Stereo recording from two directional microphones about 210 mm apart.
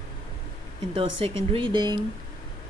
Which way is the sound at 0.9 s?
25° right (ahead or behind).